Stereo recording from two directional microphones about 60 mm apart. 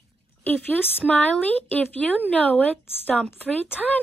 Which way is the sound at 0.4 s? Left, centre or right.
Left.